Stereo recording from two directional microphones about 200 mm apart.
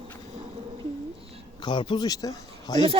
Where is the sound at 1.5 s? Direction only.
25° left (ahead or behind).